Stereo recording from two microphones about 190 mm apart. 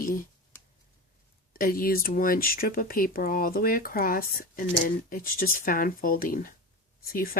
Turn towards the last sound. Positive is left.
turn(degrees=50)  # may be behind; listen again after turning